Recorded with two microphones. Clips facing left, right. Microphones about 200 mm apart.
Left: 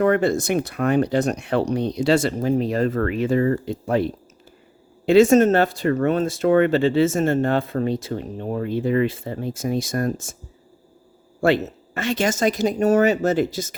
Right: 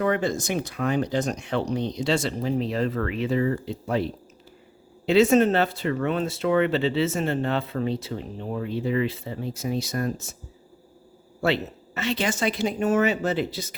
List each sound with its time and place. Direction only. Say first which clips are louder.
0.0 s speech: left 6 dB; 60° left (ahead or behind)
5.0 s speech: left 4 dB; 45° left (ahead or behind)
11.3 s speech: left 6 dB; 50° left (ahead or behind)